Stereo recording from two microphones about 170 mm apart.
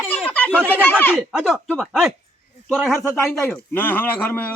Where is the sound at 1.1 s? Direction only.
Centre (ahead or behind).